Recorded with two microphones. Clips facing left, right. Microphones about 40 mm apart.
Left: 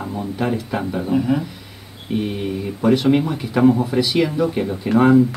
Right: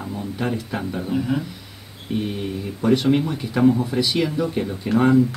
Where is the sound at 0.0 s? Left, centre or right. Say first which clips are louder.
Left 3 dB; centre.